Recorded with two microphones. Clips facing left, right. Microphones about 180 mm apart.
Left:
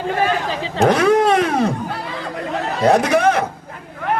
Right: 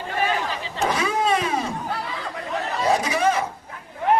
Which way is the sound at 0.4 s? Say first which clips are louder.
Left 9 dB; 85° left.